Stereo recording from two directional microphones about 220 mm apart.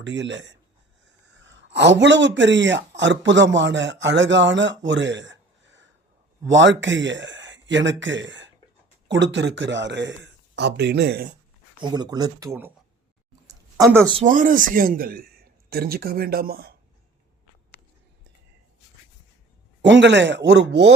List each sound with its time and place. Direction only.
0.0 s a man's voice: 55° right (ahead or behind)
11.8 s speech: 20° right (ahead or behind)
13.5 s a sound: 15° right (ahead or behind)
14.2 s speech: 35° right (ahead or behind)
19.8 s speech: 55° right (ahead or behind)